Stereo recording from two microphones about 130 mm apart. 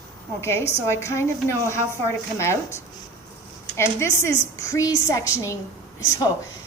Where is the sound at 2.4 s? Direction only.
20° left (ahead or behind).